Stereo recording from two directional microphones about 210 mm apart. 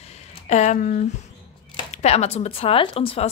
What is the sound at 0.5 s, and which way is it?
Speech, 35° left (ahead or behind).